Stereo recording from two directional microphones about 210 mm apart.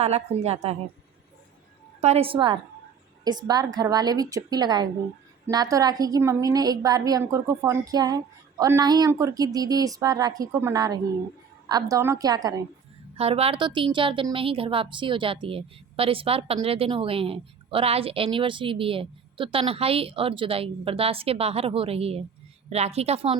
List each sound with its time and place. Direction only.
0.0 s a woman's voice: 30° right (ahead or behind)
2.0 s a woman's voice: 30° right (ahead or behind)
13.1 s a woman's voice: 30° right (ahead or behind)